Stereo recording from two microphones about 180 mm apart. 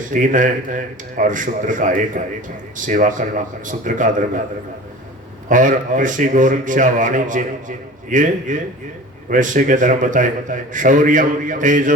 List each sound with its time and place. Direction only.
0.1 s a man's voice: 45° right (ahead or behind)
5.5 s a man's voice: 45° right (ahead or behind)